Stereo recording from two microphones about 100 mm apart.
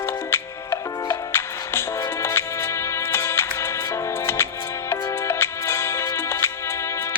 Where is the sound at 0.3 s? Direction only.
25° left (ahead or behind).